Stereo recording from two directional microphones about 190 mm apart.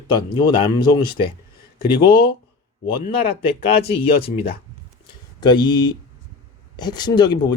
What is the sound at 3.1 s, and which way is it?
Speech, 30° left (ahead or behind).